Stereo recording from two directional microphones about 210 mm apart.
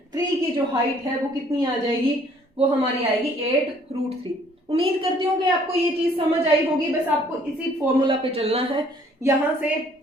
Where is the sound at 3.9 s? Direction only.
30° right (ahead or behind).